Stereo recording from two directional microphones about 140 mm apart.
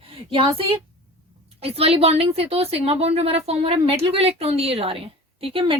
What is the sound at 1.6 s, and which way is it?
A woman's voice, 45° right (ahead or behind).